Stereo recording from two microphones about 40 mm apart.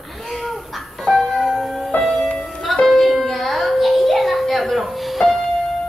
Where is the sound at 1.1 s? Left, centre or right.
Centre.